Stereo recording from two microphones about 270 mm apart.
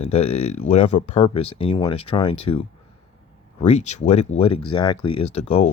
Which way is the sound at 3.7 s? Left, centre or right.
Left.